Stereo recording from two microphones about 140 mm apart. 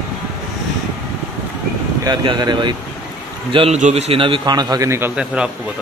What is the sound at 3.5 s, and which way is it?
A man's voice, 45° right (ahead or behind).